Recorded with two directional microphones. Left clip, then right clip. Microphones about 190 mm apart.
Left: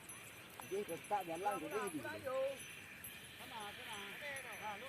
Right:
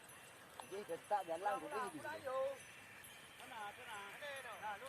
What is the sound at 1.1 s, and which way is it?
Speech, 40° left (ahead or behind).